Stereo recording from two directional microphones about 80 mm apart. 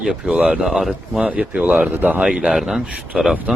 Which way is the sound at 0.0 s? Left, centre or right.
Centre.